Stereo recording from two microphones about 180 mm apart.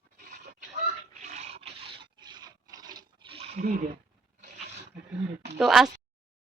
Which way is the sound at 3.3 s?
40° right (ahead or behind).